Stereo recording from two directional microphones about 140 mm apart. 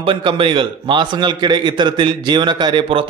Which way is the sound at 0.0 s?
35° right (ahead or behind).